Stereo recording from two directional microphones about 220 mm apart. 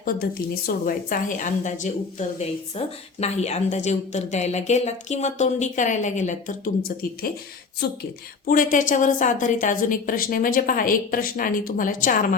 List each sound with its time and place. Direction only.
0.7 s a woman's voice: 40° left (ahead or behind)